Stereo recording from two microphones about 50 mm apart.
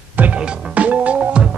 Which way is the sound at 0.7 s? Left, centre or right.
Right.